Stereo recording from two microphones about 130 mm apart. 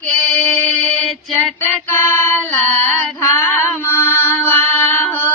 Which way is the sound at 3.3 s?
20° left (ahead or behind).